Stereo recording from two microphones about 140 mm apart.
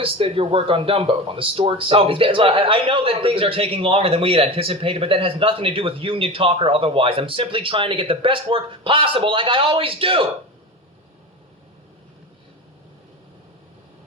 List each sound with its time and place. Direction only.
0.0 s speech: 40° right (ahead or behind)